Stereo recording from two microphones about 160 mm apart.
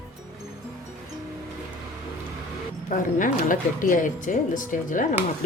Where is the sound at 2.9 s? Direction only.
55° left (ahead or behind).